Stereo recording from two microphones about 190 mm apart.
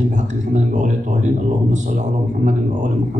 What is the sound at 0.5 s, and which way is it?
Speech, 40° right (ahead or behind).